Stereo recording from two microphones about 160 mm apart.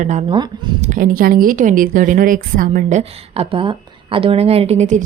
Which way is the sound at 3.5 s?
35° right (ahead or behind).